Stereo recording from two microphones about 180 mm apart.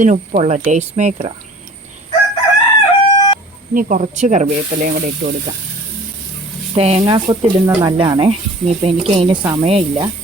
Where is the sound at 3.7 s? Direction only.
50° right (ahead or behind).